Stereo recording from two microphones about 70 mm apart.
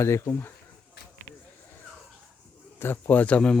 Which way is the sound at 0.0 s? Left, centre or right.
Left.